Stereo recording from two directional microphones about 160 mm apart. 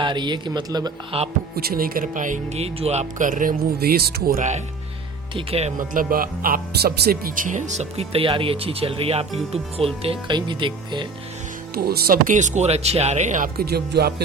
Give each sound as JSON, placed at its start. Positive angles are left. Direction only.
{"t": 0.0, "sound": "speech", "side_deg": -30}
{"t": 1.5, "sound": "speech", "side_deg": -70}
{"t": 5.3, "sound": "speech", "side_deg": -35}
{"t": 5.9, "sound": "speech", "side_deg": -60}
{"t": 11.7, "sound": "speech", "side_deg": -70}
{"t": 13.6, "sound": "speech", "side_deg": -85}